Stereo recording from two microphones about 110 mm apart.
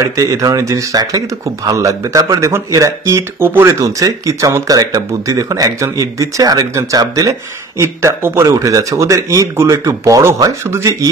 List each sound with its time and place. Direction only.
0.1 s speech: 30° right (ahead or behind)